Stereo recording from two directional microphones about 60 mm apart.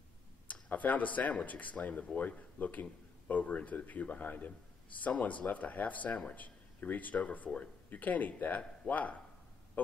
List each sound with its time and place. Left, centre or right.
0.5 s a man's voice: left